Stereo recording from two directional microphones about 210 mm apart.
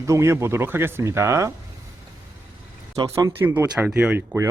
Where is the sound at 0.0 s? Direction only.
15° right (ahead or behind).